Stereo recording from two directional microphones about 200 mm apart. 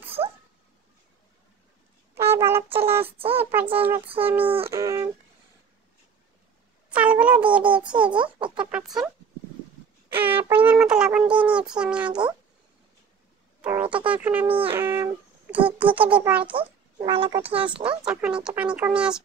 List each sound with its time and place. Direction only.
0.0 s cat: 30° right (ahead or behind)
2.2 s wind instrument: 10° right (ahead or behind)
3.0 s a child's voice: 30° right (ahead or behind)
3.7 s a child's voice: 10° right (ahead or behind)
4.6 s a sound: 15° right (ahead or behind)
6.9 s a sound: 5° right (ahead or behind)
7.9 s a child's voice: 25° right (ahead or behind)
8.5 s speech: 5° right (ahead or behind)
10.1 s speech: 10° right (ahead or behind)
13.6 s a child's voice: 10° right (ahead or behind)
16.5 s a child's voice: 25° right (ahead or behind)
18.0 s speech: 5° right (ahead or behind)